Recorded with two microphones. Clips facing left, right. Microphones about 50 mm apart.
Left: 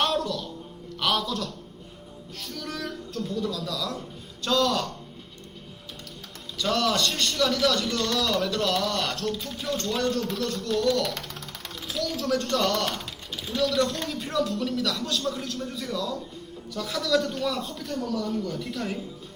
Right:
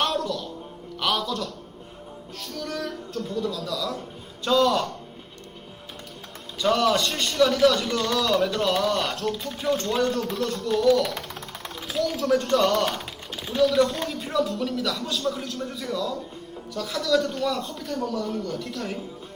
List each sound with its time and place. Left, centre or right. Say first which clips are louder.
0.0 s music: even; centre
0.9 s a man's voice: right 1 dB; centre
6.6 s a man's voice: right 3 dB; centre
10.0 s a man's voice: right 2 dB; right
10.2 s speech: right 2 dB; centre
11.8 s a sound: right 4 dB; centre
12.3 s a man's voice: right 4 dB; centre